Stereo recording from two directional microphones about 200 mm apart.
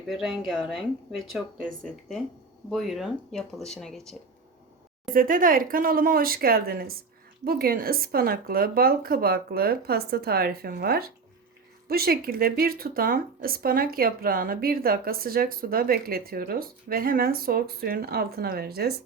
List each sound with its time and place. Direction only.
0.1 s speech: centre (ahead or behind)
5.1 s speech: 45° right (ahead or behind)